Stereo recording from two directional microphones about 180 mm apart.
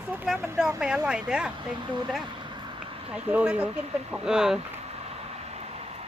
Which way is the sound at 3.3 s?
10° right (ahead or behind).